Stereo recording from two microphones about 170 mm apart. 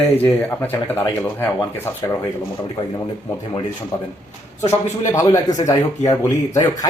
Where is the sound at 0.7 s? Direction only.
10° left (ahead or behind).